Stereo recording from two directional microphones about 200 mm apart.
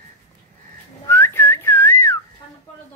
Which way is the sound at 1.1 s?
10° left (ahead or behind).